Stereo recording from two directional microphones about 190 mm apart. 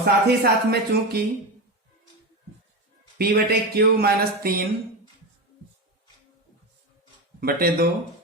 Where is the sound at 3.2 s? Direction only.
55° right (ahead or behind).